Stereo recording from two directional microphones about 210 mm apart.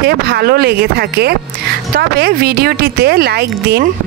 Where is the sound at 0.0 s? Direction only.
50° right (ahead or behind).